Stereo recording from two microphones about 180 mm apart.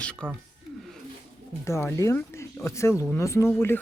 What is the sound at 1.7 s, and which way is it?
Speech, 15° left (ahead or behind).